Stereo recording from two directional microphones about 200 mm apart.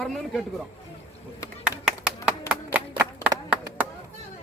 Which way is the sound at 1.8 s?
5° right (ahead or behind).